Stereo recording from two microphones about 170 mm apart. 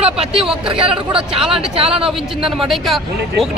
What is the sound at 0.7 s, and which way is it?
Speech, 30° right (ahead or behind).